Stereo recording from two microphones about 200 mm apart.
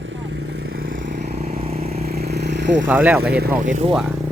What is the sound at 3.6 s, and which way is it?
Speech, 35° right (ahead or behind).